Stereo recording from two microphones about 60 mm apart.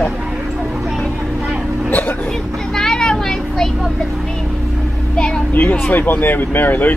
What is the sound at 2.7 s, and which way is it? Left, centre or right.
Vehicle, centre.